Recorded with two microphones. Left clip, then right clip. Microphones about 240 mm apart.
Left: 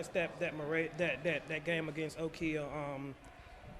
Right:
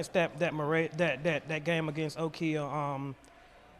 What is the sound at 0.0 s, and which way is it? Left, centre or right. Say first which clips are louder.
Speech: right 6 dB; right.